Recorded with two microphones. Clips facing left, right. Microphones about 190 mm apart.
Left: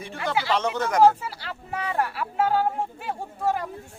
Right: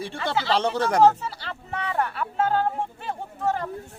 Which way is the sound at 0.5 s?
30° right (ahead or behind).